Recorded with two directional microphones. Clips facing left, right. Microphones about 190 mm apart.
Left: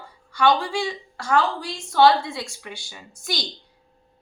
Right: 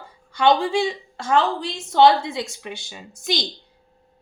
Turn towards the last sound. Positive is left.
turn(degrees=-20)  # may be behind; listen again after turning